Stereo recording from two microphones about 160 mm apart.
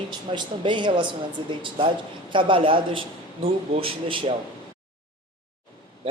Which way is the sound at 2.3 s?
30° right (ahead or behind).